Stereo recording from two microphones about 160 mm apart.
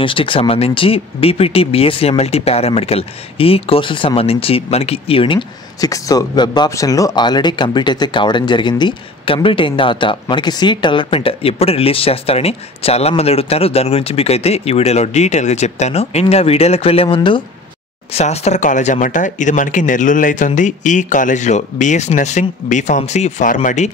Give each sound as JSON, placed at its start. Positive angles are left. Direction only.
{"t": 0.0, "sound": "speech", "side_deg": 35}
{"t": 5.8, "sound": "speech", "side_deg": 20}